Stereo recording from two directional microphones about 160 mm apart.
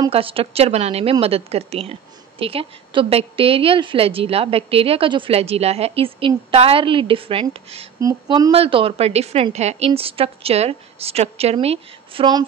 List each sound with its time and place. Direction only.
0.1 s a woman's voice: 35° right (ahead or behind)
8.0 s a woman's voice: 20° right (ahead or behind)